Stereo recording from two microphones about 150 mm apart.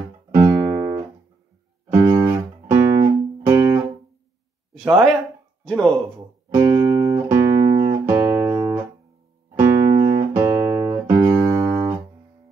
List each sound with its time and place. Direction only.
0.3 s music: 15° right (ahead or behind)
5.7 s speech: 5° left (ahead or behind)
6.5 s music: 20° right (ahead or behind)